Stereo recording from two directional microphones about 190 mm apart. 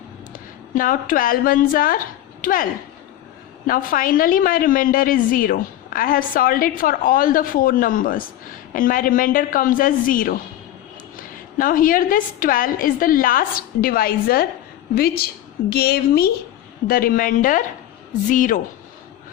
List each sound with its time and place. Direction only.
0.3 s a woman's voice: 45° left (ahead or behind)
3.7 s a woman's voice: 45° left (ahead or behind)